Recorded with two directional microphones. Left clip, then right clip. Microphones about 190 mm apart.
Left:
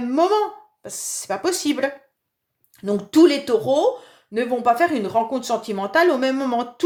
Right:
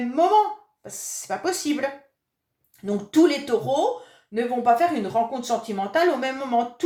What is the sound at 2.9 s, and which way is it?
A woman's voice, 50° left (ahead or behind).